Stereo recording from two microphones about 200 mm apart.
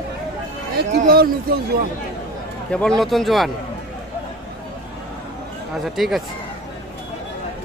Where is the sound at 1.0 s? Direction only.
50° right (ahead or behind).